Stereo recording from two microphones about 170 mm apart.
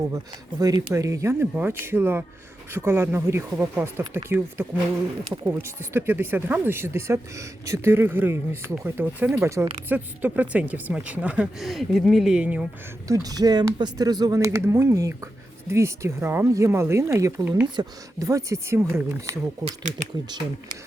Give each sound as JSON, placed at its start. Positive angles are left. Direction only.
{"t": 0.6, "sound": "speech", "side_deg": -20}
{"t": 13.1, "sound": "speech", "side_deg": -20}